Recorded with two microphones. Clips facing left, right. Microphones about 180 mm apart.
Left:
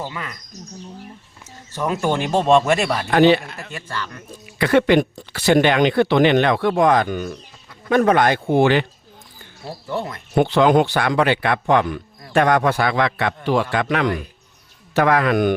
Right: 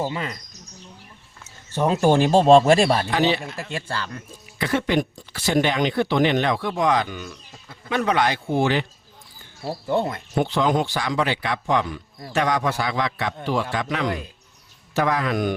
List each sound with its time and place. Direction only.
0.0 s speech: 25° right (ahead or behind)
1.7 s speech: 30° right (ahead or behind)
3.1 s a man's voice: 60° left (ahead or behind)
3.7 s speech: 30° right (ahead or behind)
4.5 s speech: 70° left (ahead or behind)
9.6 s speech: 25° right (ahead or behind)
10.3 s a man's voice: 70° left (ahead or behind)